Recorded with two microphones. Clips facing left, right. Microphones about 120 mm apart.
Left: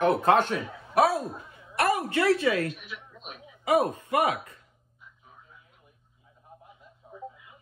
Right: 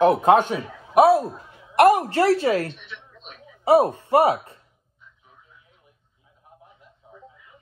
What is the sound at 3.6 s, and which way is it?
Speech, 30° right (ahead or behind).